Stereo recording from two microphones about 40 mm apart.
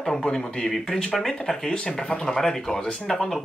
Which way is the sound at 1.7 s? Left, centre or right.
Left.